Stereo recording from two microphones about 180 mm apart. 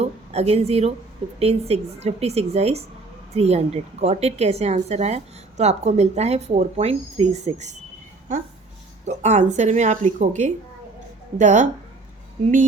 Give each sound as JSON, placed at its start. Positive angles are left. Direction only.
{"t": 0.0, "sound": "a woman's voice", "side_deg": -35}
{"t": 9.0, "sound": "a woman's voice", "side_deg": -40}